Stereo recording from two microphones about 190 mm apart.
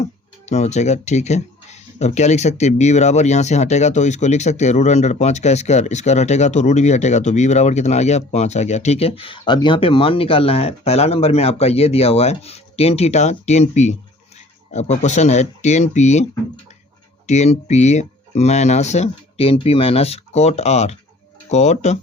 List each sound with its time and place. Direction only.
0.4 s speech: 35° left (ahead or behind)
17.2 s speech: 35° left (ahead or behind)